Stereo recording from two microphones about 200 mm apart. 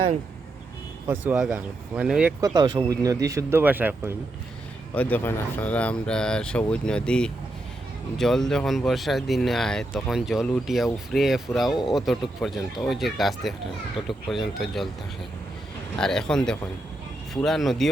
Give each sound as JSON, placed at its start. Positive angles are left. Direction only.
{"t": 1.0, "sound": "speech", "side_deg": -10}
{"t": 2.4, "sound": "speech", "side_deg": -20}
{"t": 4.9, "sound": "speech", "side_deg": 10}
{"t": 16.0, "sound": "speech", "side_deg": 5}